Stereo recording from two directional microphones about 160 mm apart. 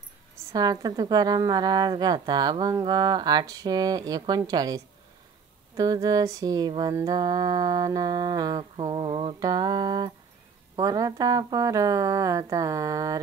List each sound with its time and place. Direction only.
0.5 s a woman's voice: 25° right (ahead or behind)